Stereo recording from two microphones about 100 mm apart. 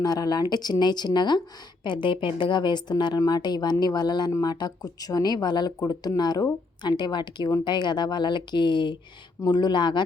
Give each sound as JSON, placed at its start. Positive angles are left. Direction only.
{"t": 0.0, "sound": "speech", "side_deg": 40}